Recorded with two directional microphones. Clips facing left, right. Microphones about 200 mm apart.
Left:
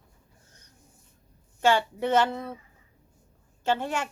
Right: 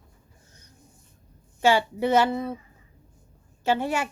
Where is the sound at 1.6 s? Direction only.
10° right (ahead or behind).